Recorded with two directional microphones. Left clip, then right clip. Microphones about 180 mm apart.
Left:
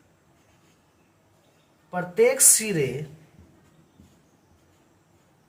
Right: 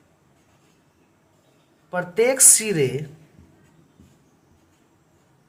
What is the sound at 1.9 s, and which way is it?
Speech, 40° right (ahead or behind).